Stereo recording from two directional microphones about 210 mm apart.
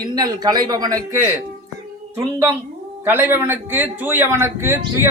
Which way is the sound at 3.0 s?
10° right (ahead or behind).